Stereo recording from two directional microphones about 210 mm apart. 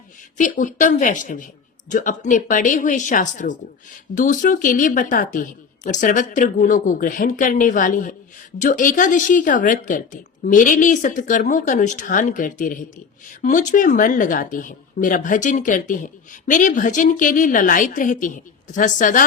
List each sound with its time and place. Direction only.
0.3 s speech: 40° left (ahead or behind)